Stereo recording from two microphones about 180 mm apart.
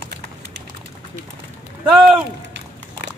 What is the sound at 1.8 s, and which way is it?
Speech, 5° right (ahead or behind).